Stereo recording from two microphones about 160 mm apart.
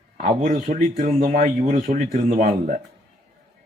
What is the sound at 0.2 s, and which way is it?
A man's voice, 50° right (ahead or behind).